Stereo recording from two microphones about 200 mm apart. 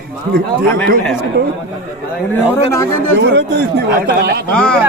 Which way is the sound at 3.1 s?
60° right (ahead or behind).